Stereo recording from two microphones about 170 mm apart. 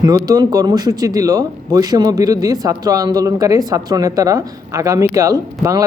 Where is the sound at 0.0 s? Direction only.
20° right (ahead or behind).